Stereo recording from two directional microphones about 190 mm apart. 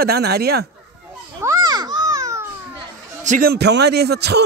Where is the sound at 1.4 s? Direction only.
15° right (ahead or behind).